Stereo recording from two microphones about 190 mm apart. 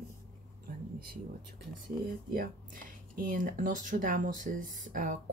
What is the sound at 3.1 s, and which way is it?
Speech, 45° right (ahead or behind).